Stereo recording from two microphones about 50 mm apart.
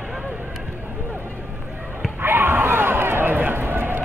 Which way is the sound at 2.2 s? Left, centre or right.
Right.